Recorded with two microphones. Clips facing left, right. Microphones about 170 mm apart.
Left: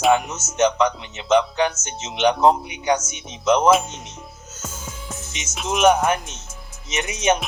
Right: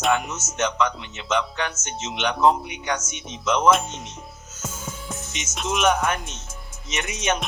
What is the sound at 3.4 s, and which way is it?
Speech, 35° left (ahead or behind).